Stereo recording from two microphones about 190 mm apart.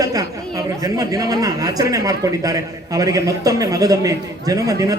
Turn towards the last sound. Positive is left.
turn(degrees=-20)  # may be behind; listen again after turning